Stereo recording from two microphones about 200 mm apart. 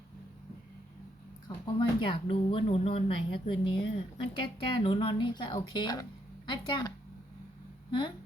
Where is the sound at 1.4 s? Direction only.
25° left (ahead or behind).